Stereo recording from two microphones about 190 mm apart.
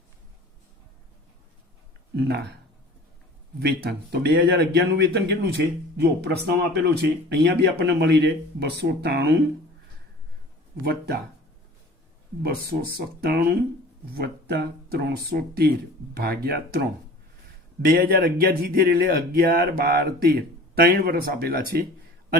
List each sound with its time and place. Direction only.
2.1 s speech: 60° right (ahead or behind)
3.8 s speech: 55° right (ahead or behind)
10.8 s speech: 55° right (ahead or behind)
12.4 s speech: 55° right (ahead or behind)
17.8 s speech: 50° right (ahead or behind)